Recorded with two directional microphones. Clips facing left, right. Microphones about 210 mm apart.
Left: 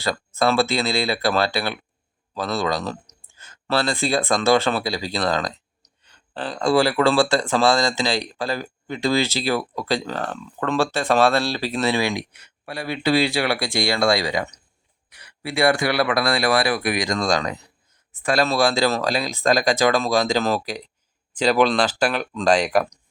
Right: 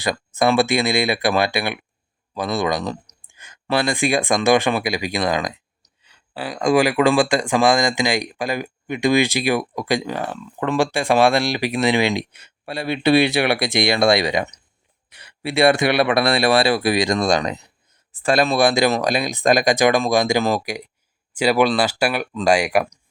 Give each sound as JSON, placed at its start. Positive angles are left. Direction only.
{"t": 0.0, "sound": "speech", "side_deg": -15}
{"t": 18.1, "sound": "speech", "side_deg": -30}
{"t": 18.3, "sound": "speech", "side_deg": -20}